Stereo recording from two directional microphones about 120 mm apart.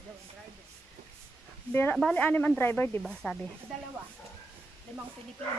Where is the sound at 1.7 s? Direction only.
15° left (ahead or behind).